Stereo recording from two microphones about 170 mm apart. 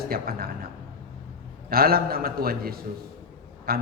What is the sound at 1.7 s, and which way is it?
A man's voice, 60° right (ahead or behind).